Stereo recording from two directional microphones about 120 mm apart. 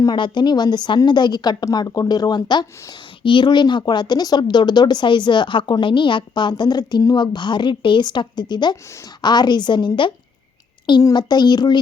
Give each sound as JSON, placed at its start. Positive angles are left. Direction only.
{"t": 0.0, "sound": "a woman's voice", "side_deg": 35}